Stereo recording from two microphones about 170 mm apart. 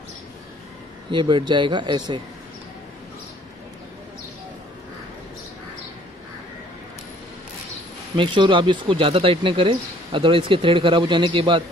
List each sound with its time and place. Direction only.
1.1 s speech: 25° right (ahead or behind)
8.2 s speech: 30° right (ahead or behind)